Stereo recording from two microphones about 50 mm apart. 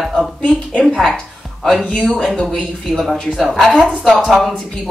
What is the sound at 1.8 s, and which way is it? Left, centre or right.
Speech, left.